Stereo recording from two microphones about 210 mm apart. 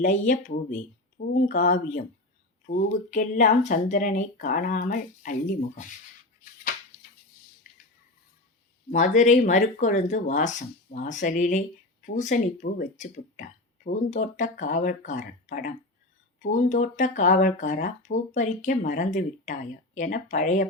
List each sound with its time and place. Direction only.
0.0 s speech: 40° left (ahead or behind)
7.6 s a sound: 40° left (ahead or behind)
8.9 s speech: 35° left (ahead or behind)